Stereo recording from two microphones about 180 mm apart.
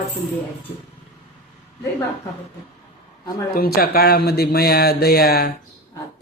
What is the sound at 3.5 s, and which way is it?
Speech, 55° left (ahead or behind).